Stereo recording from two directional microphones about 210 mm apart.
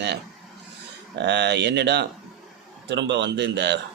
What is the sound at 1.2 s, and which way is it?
Speech, 55° right (ahead or behind).